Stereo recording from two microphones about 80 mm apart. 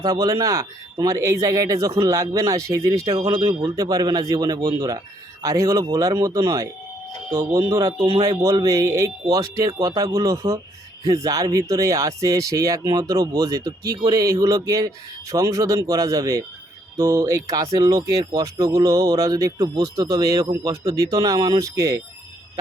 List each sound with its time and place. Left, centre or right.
0.0 s speech: right
7.3 s speech: right